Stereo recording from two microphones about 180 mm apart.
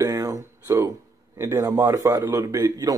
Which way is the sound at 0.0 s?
20° right (ahead or behind).